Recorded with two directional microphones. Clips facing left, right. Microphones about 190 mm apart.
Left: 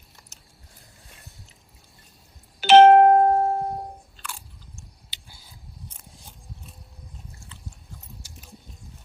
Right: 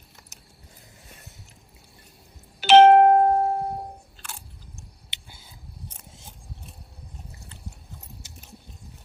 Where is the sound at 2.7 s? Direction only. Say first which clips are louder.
Left 1 dB; 5° left (ahead or behind).